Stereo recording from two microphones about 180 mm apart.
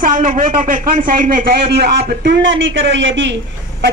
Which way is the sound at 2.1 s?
70° right (ahead or behind).